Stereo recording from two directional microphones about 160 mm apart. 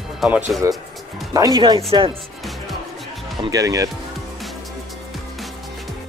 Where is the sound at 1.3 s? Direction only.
20° right (ahead or behind).